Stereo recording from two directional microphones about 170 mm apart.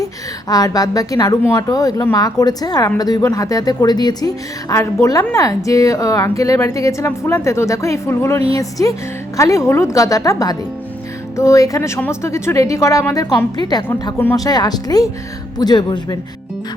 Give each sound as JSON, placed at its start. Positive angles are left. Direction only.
{"t": 0.0, "sound": "speech", "side_deg": 20}